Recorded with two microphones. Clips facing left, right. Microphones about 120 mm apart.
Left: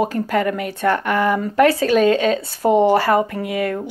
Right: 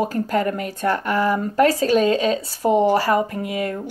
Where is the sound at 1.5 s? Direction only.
35° right (ahead or behind).